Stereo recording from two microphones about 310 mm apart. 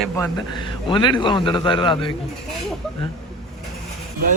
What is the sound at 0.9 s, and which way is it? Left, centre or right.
A man's voice, centre.